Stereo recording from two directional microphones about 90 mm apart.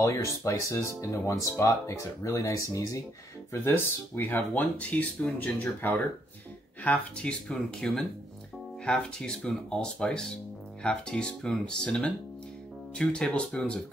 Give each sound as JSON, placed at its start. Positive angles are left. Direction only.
{"t": 0.0, "sound": "speech", "side_deg": 35}
{"t": 3.6, "sound": "speech", "side_deg": 25}